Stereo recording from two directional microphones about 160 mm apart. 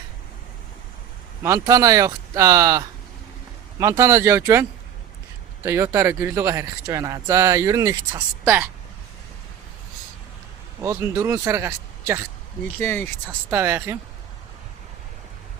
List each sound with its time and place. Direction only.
1.4 s speech: 20° right (ahead or behind)
5.6 s speech: 15° right (ahead or behind)
10.8 s speech: 15° right (ahead or behind)
12.8 s speech: 15° left (ahead or behind)
13.5 s speech: 15° right (ahead or behind)